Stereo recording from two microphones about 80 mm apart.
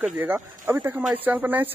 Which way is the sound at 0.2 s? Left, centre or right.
Right.